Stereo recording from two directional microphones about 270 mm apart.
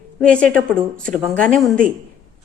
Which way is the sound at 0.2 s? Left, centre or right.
Centre.